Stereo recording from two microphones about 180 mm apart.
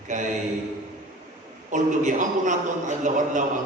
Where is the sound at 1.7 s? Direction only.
45° right (ahead or behind).